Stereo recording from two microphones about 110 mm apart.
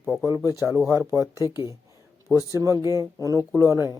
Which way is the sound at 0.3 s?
25° right (ahead or behind).